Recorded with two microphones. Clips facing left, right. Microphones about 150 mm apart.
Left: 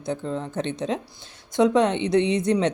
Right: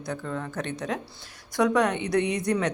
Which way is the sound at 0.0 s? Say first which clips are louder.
Left 4 dB; 25° left (ahead or behind).